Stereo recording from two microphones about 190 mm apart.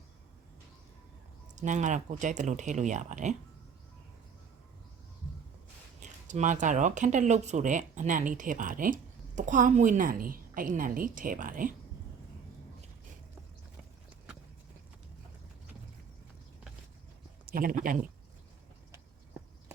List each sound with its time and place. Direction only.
1.5 s speech: 40° right (ahead or behind)
6.0 s speech: 40° right (ahead or behind)
17.4 s speech: 50° right (ahead or behind)